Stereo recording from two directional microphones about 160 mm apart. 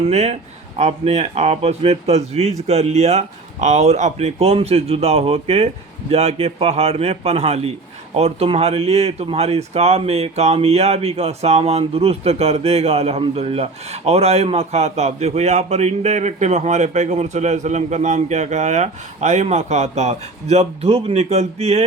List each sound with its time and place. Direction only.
0.0 s speech: 45° right (ahead or behind)